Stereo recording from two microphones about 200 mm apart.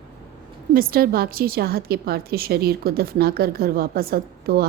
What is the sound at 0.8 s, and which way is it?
A woman's voice, 50° right (ahead or behind).